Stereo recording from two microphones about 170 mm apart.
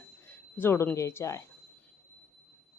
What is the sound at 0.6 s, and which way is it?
Speech, 15° left (ahead or behind).